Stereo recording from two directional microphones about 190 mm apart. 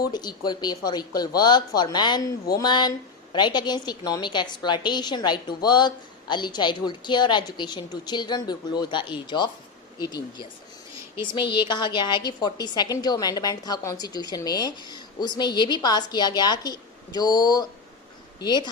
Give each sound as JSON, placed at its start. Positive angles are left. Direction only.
{"t": 0.1, "sound": "a woman's voice", "side_deg": 20}